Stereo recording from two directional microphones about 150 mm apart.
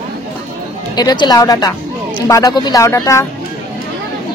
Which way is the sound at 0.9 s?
30° left (ahead or behind).